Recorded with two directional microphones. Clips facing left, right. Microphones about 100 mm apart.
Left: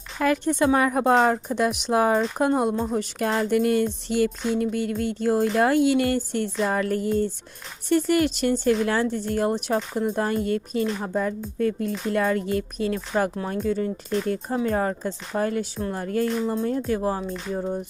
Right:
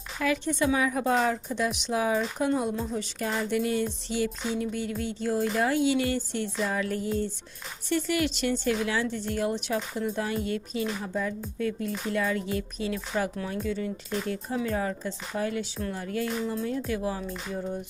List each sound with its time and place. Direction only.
0.2 s a woman's voice: 50° left (ahead or behind)